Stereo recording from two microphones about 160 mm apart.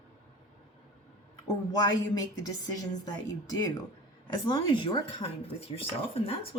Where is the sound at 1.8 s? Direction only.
25° left (ahead or behind).